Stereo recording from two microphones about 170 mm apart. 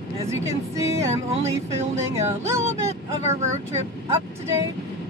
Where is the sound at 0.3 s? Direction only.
15° right (ahead or behind).